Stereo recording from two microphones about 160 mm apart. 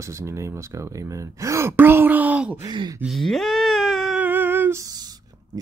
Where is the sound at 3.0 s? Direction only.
Centre (ahead or behind).